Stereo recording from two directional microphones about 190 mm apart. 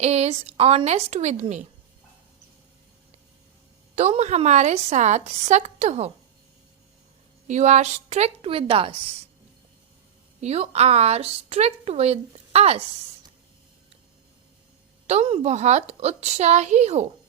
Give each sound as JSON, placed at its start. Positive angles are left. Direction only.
{"t": 0.0, "sound": "a woman's voice", "side_deg": -35}
{"t": 3.9, "sound": "a woman's voice", "side_deg": -35}
{"t": 7.4, "sound": "a woman's voice", "side_deg": -40}
{"t": 10.4, "sound": "a woman's voice", "side_deg": -35}
{"t": 15.0, "sound": "a woman's voice", "side_deg": -30}